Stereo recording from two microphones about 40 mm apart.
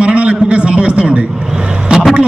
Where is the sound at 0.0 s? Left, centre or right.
Right.